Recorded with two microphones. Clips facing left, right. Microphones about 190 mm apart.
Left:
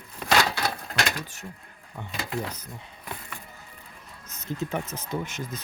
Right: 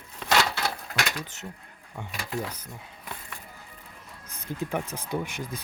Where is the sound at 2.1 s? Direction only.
20° left (ahead or behind).